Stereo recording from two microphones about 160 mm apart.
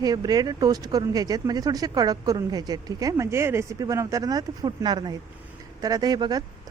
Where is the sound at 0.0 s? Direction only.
25° right (ahead or behind).